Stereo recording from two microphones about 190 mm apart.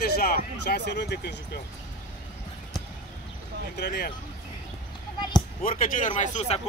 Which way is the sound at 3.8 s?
55° left (ahead or behind).